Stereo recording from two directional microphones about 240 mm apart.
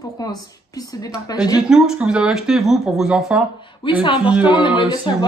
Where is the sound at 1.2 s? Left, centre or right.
Centre.